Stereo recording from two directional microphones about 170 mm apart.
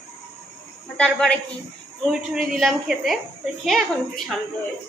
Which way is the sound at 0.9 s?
5° left (ahead or behind).